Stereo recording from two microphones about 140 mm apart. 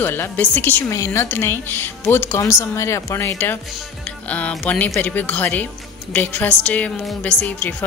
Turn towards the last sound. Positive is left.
turn(degrees=10)  # may be behind; listen again after turning